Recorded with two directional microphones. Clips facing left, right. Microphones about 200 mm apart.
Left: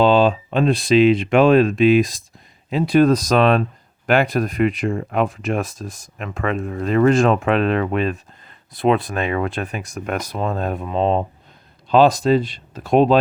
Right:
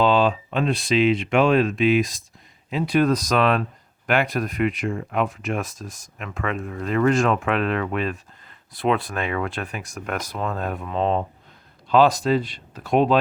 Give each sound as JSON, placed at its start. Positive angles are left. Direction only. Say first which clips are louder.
{"t": 0.0, "sound": "speech", "louder": "left 4 dB", "side_deg": 30}